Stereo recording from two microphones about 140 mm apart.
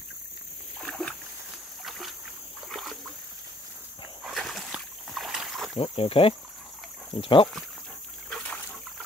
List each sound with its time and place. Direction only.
0.7 s splash: 5° left (ahead or behind)
1.9 s boat: centre (ahead or behind)
2.7 s splash: centre (ahead or behind)
4.2 s boat: centre (ahead or behind)
5.8 s speech: 40° left (ahead or behind)
8.3 s a sound: 10° left (ahead or behind)